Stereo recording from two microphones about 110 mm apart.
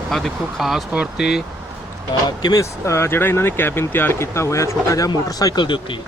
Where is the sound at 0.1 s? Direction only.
Centre (ahead or behind).